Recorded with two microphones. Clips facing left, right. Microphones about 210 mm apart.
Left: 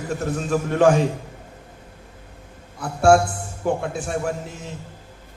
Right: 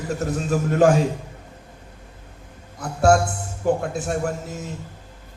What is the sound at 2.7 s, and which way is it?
A man's voice, 40° right (ahead or behind).